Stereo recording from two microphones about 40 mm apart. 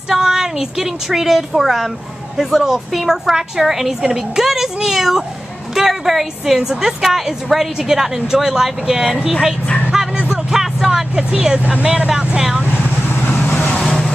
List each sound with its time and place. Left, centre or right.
0.1 s a woman's voice: centre
6.6 s a woman's voice: centre
7.1 s a woman's voice: centre
9.9 s music: centre
11.1 s speech: centre
11.6 s speech: right
12.7 s vehicle: left